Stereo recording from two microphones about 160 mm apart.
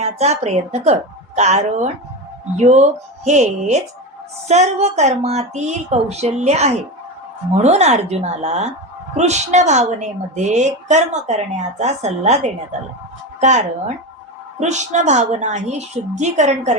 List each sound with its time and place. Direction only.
0.0 s a woman's voice: 45° right (ahead or behind)